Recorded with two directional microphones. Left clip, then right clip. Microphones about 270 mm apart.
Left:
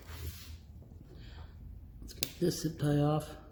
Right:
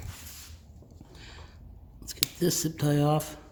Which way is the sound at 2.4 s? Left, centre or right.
Right.